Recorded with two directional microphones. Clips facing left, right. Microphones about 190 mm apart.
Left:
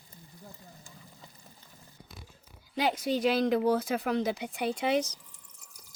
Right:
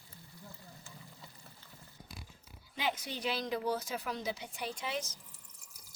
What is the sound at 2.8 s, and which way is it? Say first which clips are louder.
Speech: left 9 dB; 40° left (ahead or behind).